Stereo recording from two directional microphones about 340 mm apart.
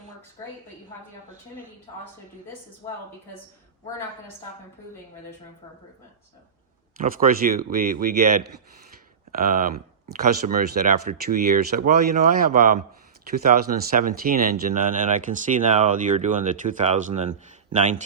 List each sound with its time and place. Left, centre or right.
7.0 s speech: right